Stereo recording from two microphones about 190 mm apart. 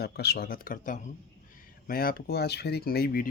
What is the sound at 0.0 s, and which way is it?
Speech, 60° left (ahead or behind).